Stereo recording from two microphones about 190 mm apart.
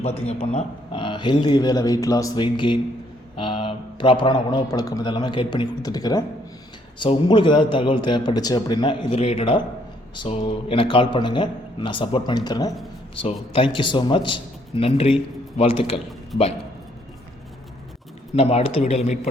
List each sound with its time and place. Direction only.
0.0 s a man's voice: 30° left (ahead or behind)
18.3 s speech: 35° left (ahead or behind)